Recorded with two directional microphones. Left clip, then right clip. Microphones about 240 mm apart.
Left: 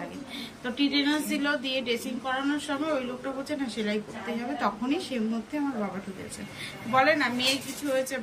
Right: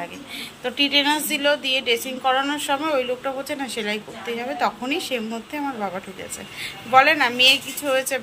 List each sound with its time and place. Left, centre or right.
0.7 s a woman's voice: centre
6.6 s a woman's voice: centre